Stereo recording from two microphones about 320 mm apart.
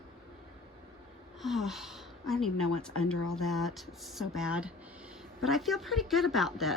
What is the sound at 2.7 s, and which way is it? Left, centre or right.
Speech, left.